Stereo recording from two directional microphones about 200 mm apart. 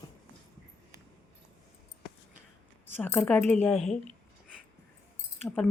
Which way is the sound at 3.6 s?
Centre (ahead or behind).